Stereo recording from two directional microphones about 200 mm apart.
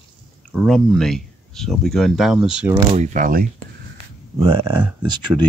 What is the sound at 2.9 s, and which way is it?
Speech, 40° right (ahead or behind).